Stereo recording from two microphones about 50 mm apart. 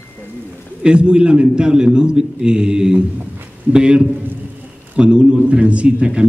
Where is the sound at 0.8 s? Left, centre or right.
Right.